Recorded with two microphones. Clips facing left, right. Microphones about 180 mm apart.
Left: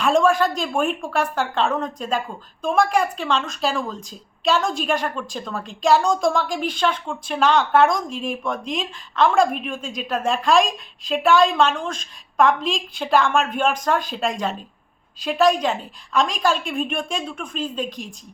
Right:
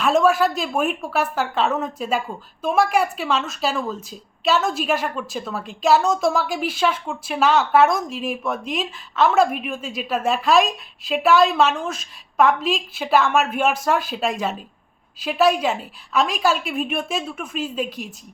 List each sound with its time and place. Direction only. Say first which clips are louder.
0.0 s a woman's voice: even; 5° right (ahead or behind)